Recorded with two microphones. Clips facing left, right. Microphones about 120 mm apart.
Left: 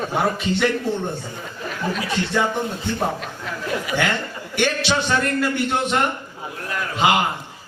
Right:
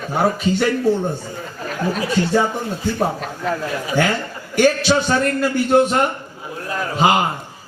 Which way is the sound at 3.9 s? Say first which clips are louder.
Right 6 dB; 40° right (ahead or behind).